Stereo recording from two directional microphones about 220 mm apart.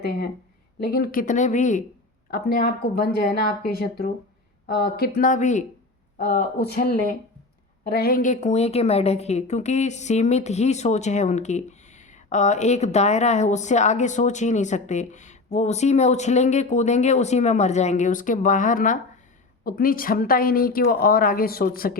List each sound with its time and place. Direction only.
0.8 s a woman's voice: 45° left (ahead or behind)